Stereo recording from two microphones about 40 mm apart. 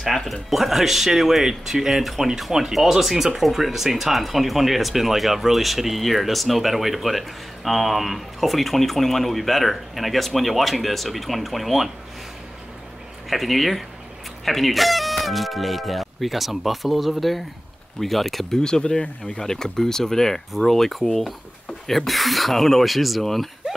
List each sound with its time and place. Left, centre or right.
0.0 s speech: centre
13.3 s speech: centre
18.6 s speech: centre
19.4 s speech: centre